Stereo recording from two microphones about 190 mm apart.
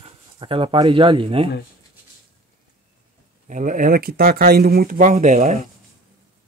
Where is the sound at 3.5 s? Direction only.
40° right (ahead or behind).